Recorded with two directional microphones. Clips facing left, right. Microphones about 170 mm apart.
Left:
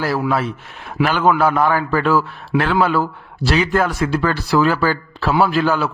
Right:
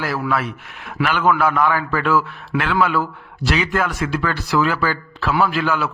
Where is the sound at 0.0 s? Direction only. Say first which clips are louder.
Left 3 dB; 30° left (ahead or behind).